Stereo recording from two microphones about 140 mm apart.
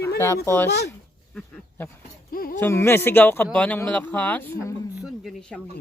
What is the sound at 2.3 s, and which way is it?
Speech, 90° left.